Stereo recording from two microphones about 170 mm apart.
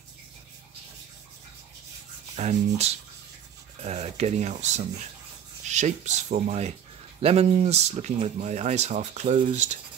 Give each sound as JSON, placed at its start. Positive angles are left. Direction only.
{"t": 2.3, "sound": "speech", "side_deg": -40}